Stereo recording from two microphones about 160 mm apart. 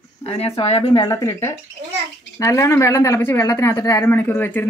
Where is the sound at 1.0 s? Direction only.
20° left (ahead or behind).